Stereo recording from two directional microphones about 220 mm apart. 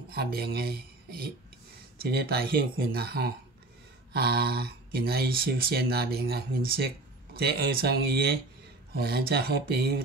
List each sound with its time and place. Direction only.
0.1 s speech: 45° right (ahead or behind)